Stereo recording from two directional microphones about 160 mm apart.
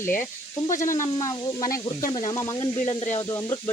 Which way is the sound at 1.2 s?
20° left (ahead or behind).